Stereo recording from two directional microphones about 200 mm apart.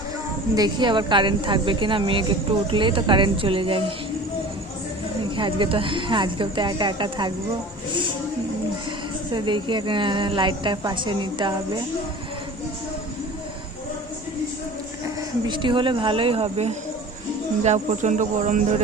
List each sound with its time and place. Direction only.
0.5 s speech: 20° right (ahead or behind)
5.4 s speech: 25° right (ahead or behind)
9.3 s speech: 25° right (ahead or behind)
15.4 s speech: 25° right (ahead or behind)